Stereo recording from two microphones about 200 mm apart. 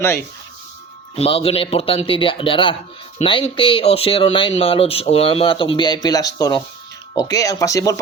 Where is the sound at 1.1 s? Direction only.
30° left (ahead or behind).